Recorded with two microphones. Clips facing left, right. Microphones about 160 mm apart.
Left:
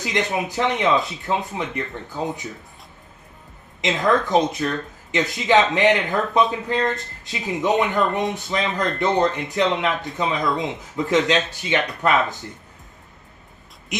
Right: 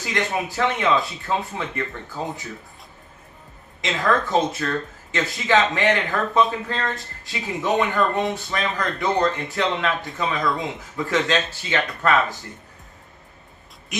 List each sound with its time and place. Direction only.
0.0 s speech: 20° left (ahead or behind)
3.8 s speech: 20° left (ahead or behind)
13.9 s a sound: 20° left (ahead or behind)